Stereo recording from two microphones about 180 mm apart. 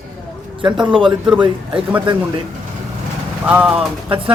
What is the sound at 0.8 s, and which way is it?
Speech, 25° right (ahead or behind).